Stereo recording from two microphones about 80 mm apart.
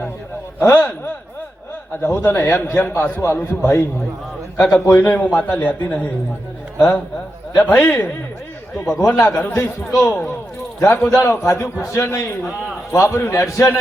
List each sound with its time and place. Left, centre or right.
0.7 s a man's voice: left
3.2 s a man's voice: left
4.9 s a man's voice: left